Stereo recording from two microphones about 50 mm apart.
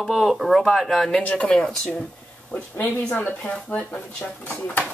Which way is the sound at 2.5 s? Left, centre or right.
Left.